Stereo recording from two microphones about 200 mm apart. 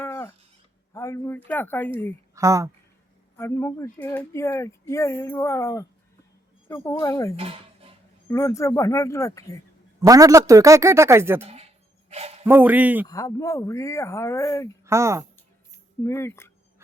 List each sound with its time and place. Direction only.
0.0 s a sound: 10° left (ahead or behind)
0.9 s speech: 15° left (ahead or behind)
2.3 s a man's voice: 15° right (ahead or behind)
3.3 s speech: 10° left (ahead or behind)
7.3 s a sound: 30° right (ahead or behind)
8.3 s speech: 15° left (ahead or behind)
10.0 s a man's voice: 15° right (ahead or behind)
11.4 s speech: 30° right (ahead or behind)
12.1 s a sound: 30° right (ahead or behind)
12.5 s a man's voice: 10° right (ahead or behind)
13.1 s speech: 15° left (ahead or behind)
14.8 s a woman's voice: 15° right (ahead or behind)
16.0 s speech: 10° left (ahead or behind)